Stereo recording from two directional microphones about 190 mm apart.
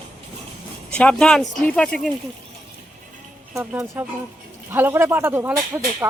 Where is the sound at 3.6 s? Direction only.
15° right (ahead or behind).